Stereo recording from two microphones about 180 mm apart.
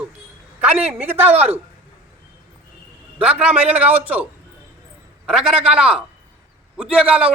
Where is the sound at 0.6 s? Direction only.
10° right (ahead or behind).